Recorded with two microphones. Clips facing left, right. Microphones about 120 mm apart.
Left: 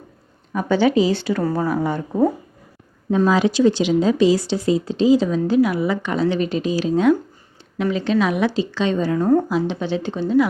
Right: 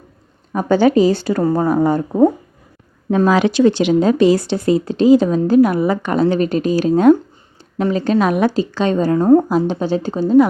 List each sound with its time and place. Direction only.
0.5 s speech: 45° right (ahead or behind)
1.4 s a woman's voice: 25° right (ahead or behind)
3.1 s speech: 70° right (ahead or behind); by 9.2 s 45° right (ahead or behind)
9.2 s a woman's voice: 30° right (ahead or behind)
9.5 s speech: 45° right (ahead or behind)